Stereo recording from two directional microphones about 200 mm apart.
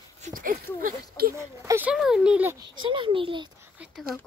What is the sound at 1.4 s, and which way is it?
A child's voice, 10° right (ahead or behind).